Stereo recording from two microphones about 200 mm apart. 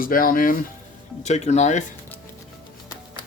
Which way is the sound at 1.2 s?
35° left (ahead or behind).